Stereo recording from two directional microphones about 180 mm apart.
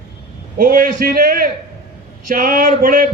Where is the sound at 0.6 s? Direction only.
45° right (ahead or behind).